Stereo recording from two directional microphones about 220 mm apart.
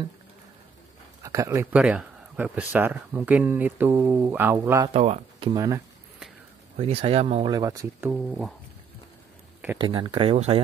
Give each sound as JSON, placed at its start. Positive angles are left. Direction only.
{"t": 1.2, "sound": "speech", "side_deg": -15}
{"t": 4.9, "sound": "speech", "side_deg": -30}
{"t": 6.8, "sound": "speech", "side_deg": -25}
{"t": 7.5, "sound": "speech", "side_deg": -15}
{"t": 9.8, "sound": "speech", "side_deg": -20}